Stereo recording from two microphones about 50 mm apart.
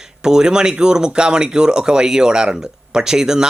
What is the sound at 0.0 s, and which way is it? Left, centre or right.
Speech, centre.